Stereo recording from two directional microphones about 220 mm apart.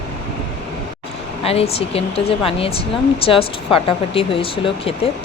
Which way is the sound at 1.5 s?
25° left (ahead or behind).